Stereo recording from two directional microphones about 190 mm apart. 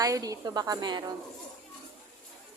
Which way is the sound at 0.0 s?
20° right (ahead or behind).